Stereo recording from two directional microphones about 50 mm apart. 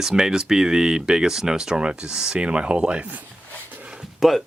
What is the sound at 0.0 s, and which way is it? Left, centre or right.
Speech, centre.